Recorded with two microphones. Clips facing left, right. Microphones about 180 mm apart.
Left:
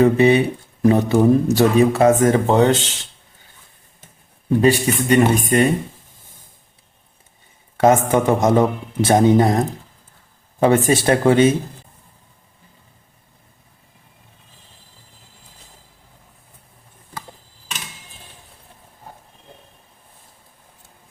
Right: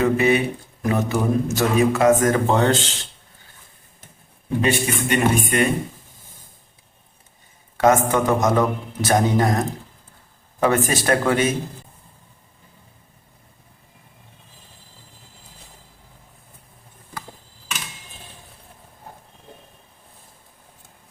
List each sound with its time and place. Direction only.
0.0 s speech: 30° left (ahead or behind)
4.6 s speech: 35° left (ahead or behind)
7.8 s a man's voice: 25° left (ahead or behind)